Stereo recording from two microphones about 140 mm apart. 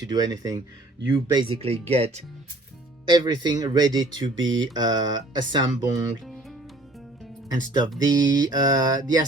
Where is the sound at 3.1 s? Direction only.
30° right (ahead or behind).